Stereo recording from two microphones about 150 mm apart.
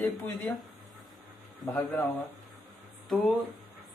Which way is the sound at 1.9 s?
10° left (ahead or behind).